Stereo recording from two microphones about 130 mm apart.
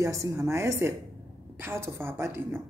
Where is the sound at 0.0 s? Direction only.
25° right (ahead or behind).